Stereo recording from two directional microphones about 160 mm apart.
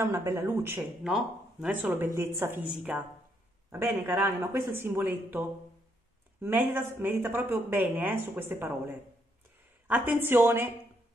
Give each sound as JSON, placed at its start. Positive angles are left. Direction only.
{"t": 0.0, "sound": "speech", "side_deg": -15}
{"t": 1.0, "sound": "speech", "side_deg": -5}
{"t": 6.4, "sound": "speech", "side_deg": -15}